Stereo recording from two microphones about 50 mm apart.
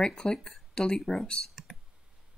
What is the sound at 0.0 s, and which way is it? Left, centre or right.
Speech, centre.